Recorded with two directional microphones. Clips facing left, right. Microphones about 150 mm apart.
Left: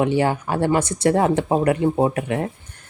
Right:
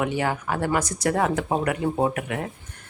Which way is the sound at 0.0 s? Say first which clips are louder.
Left 6 dB; 30° left (ahead or behind).